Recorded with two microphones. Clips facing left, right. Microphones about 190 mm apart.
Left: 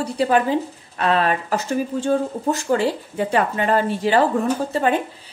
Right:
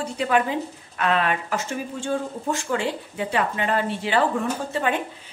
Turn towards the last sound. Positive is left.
turn(degrees=40)  # may be behind; listen again after turning